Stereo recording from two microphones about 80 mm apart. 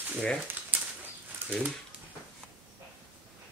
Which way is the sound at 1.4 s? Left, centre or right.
Right.